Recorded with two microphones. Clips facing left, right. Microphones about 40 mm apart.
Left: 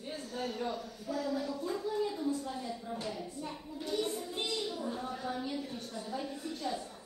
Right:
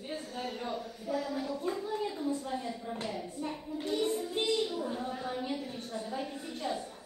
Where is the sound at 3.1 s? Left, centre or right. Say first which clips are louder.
Right 3 dB; right.